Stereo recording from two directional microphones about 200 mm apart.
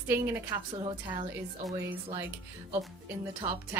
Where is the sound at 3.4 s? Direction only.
35° right (ahead or behind).